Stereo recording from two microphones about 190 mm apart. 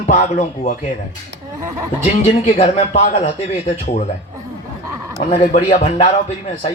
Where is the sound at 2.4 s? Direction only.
35° left (ahead or behind).